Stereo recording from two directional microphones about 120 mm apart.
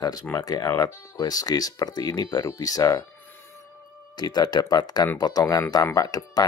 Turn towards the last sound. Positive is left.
turn(degrees=30)  # may be behind; listen again after turning